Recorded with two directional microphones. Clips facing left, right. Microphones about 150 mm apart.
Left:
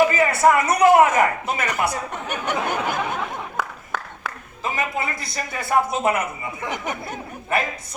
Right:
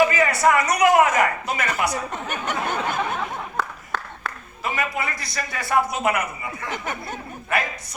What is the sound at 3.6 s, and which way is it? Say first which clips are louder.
Applause: right 1 dB; 10° left (ahead or behind).